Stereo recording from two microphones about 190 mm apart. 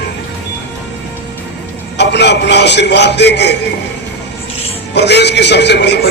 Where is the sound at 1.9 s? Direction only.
65° left (ahead or behind).